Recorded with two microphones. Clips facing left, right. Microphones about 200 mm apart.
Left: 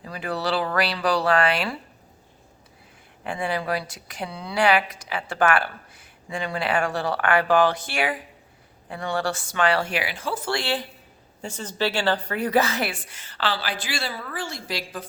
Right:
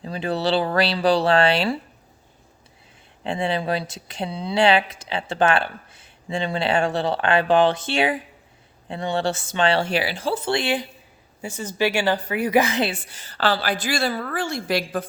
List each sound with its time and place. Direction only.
0.0 s speech: 25° right (ahead or behind)
3.2 s a woman's voice: 25° right (ahead or behind); by 15.0 s 55° right (ahead or behind)